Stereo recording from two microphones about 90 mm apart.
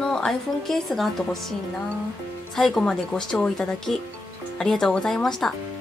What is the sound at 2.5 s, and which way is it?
Speech, 5° left (ahead or behind).